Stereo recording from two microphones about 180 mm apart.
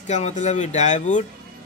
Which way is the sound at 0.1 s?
40° left (ahead or behind).